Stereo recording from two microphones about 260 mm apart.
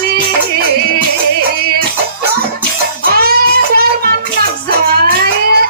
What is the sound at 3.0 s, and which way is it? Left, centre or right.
Child singing, right.